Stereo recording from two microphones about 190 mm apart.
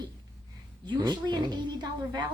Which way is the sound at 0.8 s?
25° right (ahead or behind).